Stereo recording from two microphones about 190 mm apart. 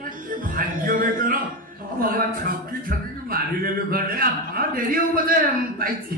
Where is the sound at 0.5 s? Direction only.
45° right (ahead or behind).